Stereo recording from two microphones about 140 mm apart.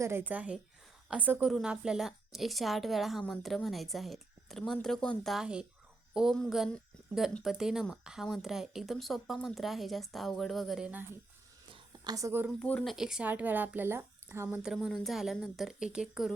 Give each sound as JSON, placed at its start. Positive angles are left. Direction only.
{"t": 0.0, "sound": "a woman's voice", "side_deg": -15}
{"t": 11.7, "sound": "a sound", "side_deg": -25}
{"t": 12.5, "sound": "speech", "side_deg": 10}
{"t": 14.6, "sound": "speech", "side_deg": -5}